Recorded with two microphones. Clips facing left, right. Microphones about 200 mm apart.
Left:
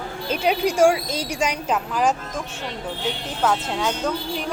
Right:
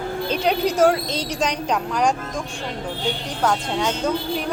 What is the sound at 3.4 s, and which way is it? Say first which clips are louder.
Speech: right 1 dB; centre (ahead or behind).